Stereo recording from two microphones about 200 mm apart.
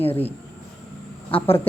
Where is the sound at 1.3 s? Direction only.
25° left (ahead or behind).